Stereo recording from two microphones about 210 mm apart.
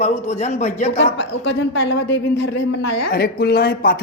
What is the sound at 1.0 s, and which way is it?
A woman's voice, 55° left (ahead or behind).